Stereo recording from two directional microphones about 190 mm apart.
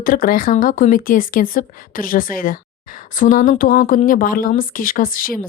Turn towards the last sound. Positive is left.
turn(degrees=45)  # may be behind; listen again after turning